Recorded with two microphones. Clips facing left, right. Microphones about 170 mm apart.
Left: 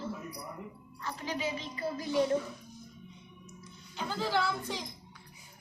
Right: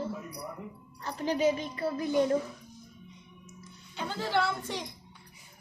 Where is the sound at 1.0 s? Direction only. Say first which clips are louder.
Right 8 dB; 45° right (ahead or behind).